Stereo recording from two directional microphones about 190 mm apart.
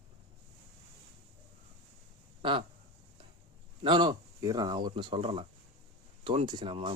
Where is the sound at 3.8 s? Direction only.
25° right (ahead or behind).